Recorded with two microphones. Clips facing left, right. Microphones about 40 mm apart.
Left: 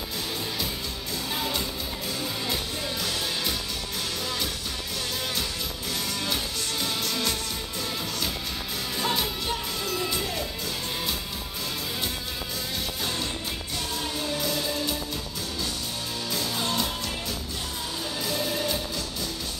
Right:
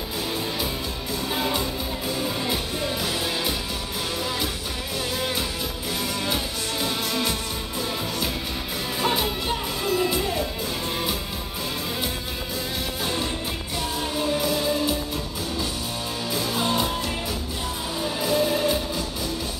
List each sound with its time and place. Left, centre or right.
1.3 s music: centre
6.2 s music: centre
9.0 s music: centre
13.0 s music: centre
16.3 s music: centre
18.0 s music: centre